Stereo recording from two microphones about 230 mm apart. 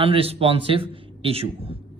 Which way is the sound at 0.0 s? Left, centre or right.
Right.